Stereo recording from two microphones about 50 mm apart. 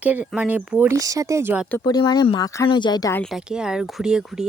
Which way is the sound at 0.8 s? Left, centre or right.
Right.